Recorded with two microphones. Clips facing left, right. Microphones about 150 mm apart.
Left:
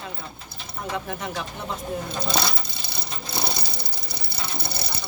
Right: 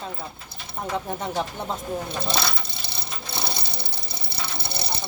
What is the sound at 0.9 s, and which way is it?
Speech, 30° right (ahead or behind).